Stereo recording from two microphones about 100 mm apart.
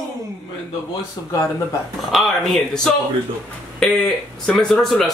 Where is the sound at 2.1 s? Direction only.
Centre (ahead or behind).